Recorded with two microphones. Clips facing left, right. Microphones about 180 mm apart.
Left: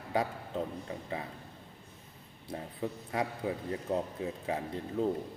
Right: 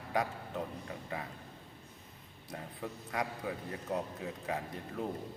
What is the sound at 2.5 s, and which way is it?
A man's voice, 25° left (ahead or behind).